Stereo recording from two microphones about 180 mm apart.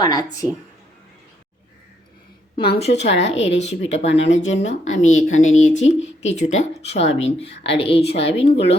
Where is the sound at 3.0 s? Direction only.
90° left.